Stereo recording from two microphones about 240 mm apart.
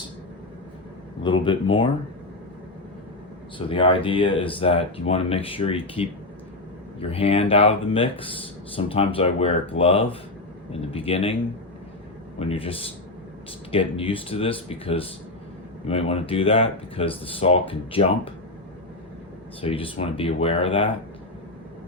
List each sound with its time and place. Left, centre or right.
1.2 s speech: centre
3.7 s speech: left
7.1 s speech: left
12.4 s speech: left
19.6 s speech: left